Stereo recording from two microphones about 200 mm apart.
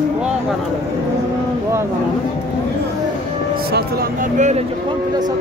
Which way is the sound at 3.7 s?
45° right (ahead or behind).